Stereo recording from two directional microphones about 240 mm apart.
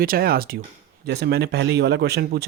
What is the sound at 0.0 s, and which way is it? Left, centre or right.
Speech, right.